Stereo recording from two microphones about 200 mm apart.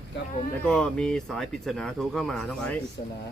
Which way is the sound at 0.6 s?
5° left (ahead or behind).